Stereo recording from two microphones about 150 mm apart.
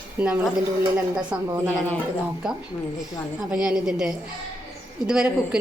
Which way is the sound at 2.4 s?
5° right (ahead or behind).